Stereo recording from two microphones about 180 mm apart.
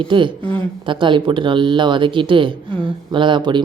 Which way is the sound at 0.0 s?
25° right (ahead or behind).